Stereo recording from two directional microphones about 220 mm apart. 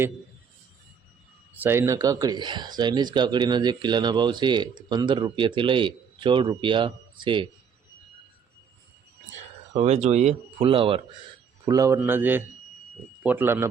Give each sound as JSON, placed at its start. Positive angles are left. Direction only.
{"t": 1.5, "sound": "speech", "side_deg": -10}
{"t": 9.7, "sound": "a man's voice", "side_deg": -30}